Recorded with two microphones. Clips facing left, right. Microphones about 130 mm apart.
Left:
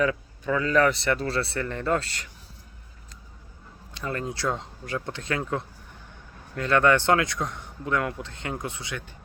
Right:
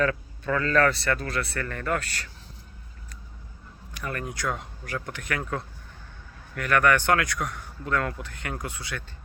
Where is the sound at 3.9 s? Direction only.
25° left (ahead or behind).